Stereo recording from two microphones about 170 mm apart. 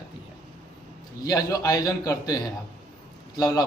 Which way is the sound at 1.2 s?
20° left (ahead or behind).